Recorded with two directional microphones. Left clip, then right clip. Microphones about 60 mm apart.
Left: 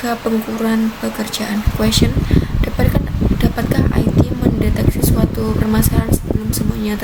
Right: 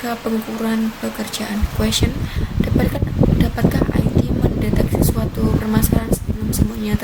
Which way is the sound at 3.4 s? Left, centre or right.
Centre.